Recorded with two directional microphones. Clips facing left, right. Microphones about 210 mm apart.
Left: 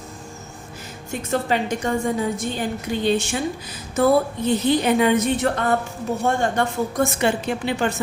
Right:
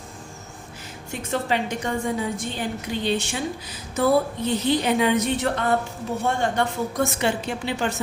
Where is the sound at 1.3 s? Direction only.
45° left (ahead or behind).